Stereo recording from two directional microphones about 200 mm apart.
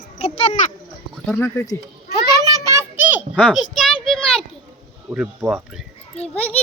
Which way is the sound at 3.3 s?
5° left (ahead or behind).